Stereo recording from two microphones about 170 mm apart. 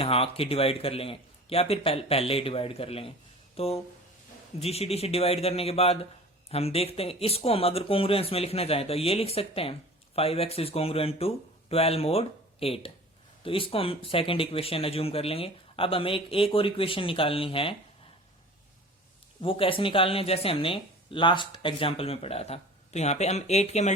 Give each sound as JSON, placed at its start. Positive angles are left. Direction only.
{"t": 0.0, "sound": "speech", "side_deg": 35}
{"t": 3.5, "sound": "a sound", "side_deg": 35}
{"t": 4.6, "sound": "speech", "side_deg": 35}
{"t": 19.4, "sound": "speech", "side_deg": 30}